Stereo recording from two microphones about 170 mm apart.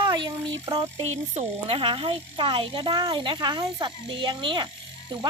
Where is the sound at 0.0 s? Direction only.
25° right (ahead or behind).